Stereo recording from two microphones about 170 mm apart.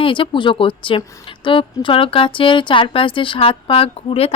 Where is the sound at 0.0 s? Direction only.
30° left (ahead or behind).